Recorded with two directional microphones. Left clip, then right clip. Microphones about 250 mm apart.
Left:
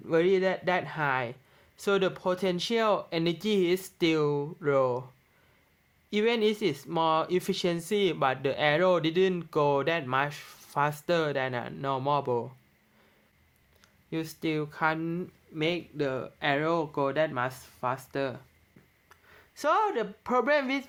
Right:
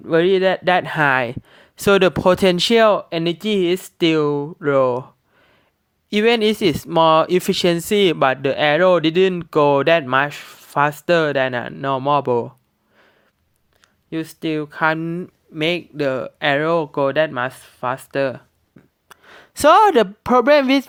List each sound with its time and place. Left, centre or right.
0.0 s speech: right
6.1 s speech: right
14.1 s speech: right
19.0 s speech: right